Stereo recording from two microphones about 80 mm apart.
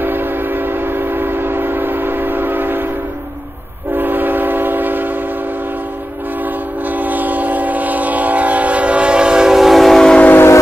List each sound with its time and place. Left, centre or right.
0.0 s train: right
3.9 s train: right
6.9 s train: right; by 10.2 s centre
10.2 s train: left